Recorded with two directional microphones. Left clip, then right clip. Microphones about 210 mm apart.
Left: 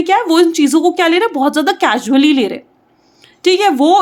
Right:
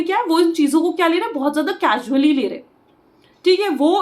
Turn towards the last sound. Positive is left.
turn(degrees=50)  # may be behind; listen again after turning